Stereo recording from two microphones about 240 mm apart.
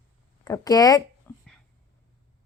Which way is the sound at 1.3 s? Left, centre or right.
Centre.